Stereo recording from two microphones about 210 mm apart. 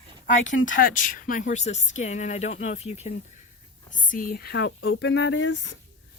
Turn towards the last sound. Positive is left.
turn(degrees=60)  # may be behind; listen again after turning